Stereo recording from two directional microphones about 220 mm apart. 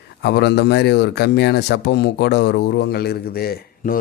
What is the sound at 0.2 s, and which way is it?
Speech, 50° left (ahead or behind).